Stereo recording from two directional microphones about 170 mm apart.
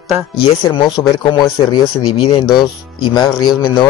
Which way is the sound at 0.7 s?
30° left (ahead or behind).